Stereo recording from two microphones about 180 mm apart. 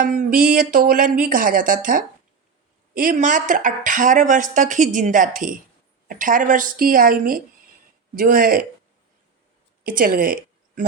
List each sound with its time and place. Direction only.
0.0 s speech: 45° right (ahead or behind)
9.8 s speech: 50° right (ahead or behind)